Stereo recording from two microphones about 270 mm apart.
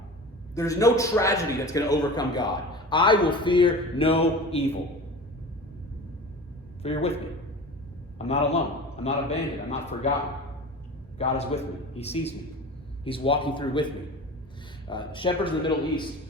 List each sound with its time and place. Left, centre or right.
0.5 s a man's voice: centre
6.8 s a man's voice: left
8.2 s a man's voice: left
11.2 s a man's voice: left
14.8 s a man's voice: centre